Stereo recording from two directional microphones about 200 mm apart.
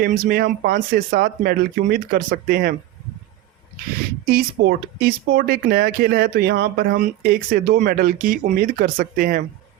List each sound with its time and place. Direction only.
0.0 s speech: 50° right (ahead or behind)
4.3 s speech: 50° right (ahead or behind)